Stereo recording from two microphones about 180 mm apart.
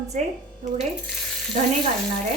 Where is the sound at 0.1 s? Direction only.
40° right (ahead or behind).